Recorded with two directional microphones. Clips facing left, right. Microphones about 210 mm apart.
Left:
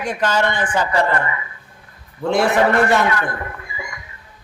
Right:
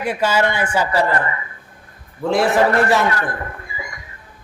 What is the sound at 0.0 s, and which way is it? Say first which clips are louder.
A man's voice: right 1 dB; 10° right (ahead or behind).